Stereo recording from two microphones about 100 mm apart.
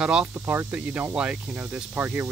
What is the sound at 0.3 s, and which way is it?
Speech, 20° right (ahead or behind).